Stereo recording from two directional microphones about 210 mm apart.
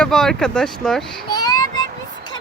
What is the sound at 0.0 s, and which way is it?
Speech, centre (ahead or behind).